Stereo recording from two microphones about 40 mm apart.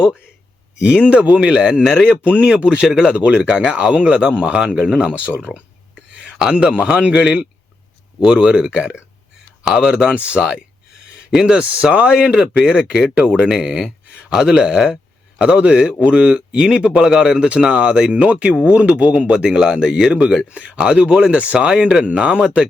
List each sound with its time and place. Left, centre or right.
0.8 s speech: right
2.0 s speech: right
5.1 s speech: right
11.5 s speech: right
12.1 s speech: centre
13.5 s speech: centre
15.4 s speech: right
16.2 s speech: centre
18.1 s speech: right
19.5 s speech: centre
19.8 s speech: centre